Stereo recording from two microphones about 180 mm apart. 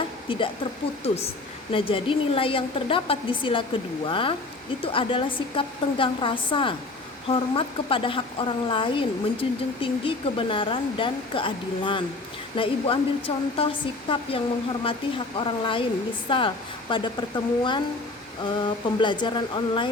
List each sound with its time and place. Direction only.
0.3 s speech: 30° left (ahead or behind)